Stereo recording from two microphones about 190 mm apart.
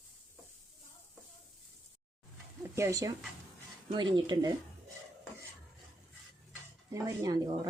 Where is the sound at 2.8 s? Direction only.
15° right (ahead or behind).